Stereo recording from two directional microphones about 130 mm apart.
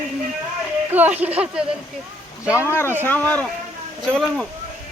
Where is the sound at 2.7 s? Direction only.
20° left (ahead or behind); by 4.5 s 5° left (ahead or behind).